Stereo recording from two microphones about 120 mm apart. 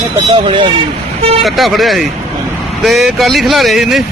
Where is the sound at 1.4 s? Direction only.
Centre (ahead or behind).